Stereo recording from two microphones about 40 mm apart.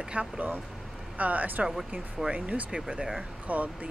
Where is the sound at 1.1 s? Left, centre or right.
Right.